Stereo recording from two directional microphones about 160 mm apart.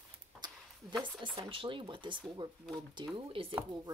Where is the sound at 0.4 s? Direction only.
25° right (ahead or behind).